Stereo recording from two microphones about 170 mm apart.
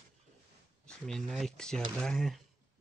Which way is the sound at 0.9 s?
Centre (ahead or behind).